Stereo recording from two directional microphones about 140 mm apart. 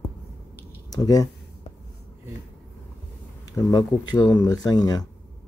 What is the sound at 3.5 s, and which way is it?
Speech, 25° left (ahead or behind).